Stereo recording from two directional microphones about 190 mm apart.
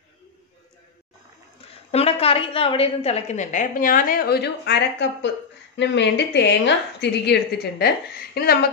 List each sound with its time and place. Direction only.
1.9 s a woman's voice: 30° left (ahead or behind); by 8.5 s 55° left (ahead or behind)